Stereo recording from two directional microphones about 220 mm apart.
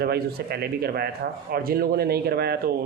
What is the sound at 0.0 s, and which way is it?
Speech, 45° right (ahead or behind).